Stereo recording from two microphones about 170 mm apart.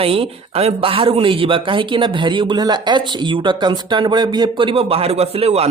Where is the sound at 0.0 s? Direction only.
35° right (ahead or behind).